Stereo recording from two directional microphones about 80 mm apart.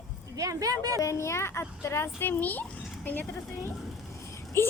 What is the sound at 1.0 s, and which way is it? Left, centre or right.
A child's voice, left.